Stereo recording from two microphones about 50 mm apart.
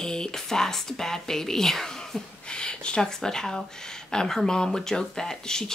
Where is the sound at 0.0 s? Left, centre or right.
Centre.